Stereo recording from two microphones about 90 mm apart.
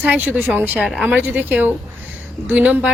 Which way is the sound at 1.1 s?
20° right (ahead or behind).